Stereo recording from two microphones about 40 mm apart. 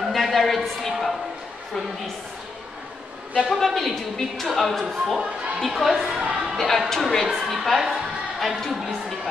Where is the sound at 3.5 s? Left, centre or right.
Centre.